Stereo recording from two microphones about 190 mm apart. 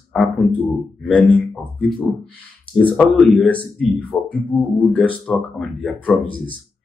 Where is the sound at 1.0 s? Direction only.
5° left (ahead or behind).